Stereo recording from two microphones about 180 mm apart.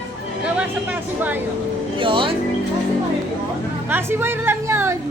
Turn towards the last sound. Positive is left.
turn(degrees=-15)  # may be behind; listen again after turning